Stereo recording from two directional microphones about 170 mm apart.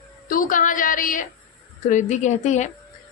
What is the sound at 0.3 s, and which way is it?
A woman's voice, 55° left (ahead or behind).